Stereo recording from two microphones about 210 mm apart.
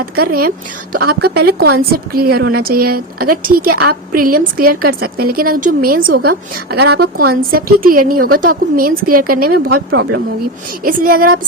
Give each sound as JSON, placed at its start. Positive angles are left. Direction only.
{"t": 0.0, "sound": "a woman's voice", "side_deg": -45}